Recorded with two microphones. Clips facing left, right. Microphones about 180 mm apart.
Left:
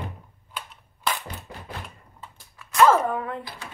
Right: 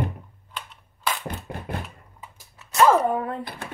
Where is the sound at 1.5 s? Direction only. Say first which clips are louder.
Right 6 dB; 55° right (ahead or behind).